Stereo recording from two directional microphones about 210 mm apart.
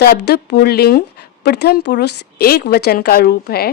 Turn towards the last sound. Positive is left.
turn(degrees=45)  # may be behind; listen again after turning